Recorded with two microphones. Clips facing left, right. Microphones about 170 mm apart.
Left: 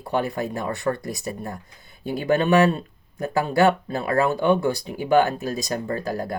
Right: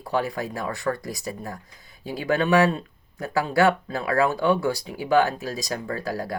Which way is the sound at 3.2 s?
20° left (ahead or behind).